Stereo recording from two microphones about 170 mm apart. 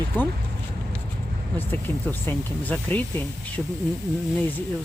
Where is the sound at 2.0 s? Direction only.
10° left (ahead or behind).